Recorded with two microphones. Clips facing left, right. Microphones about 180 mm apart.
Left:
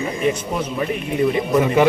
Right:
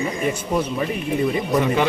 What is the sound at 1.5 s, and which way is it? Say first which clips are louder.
Speech: left 3 dB; 5° left (ahead or behind).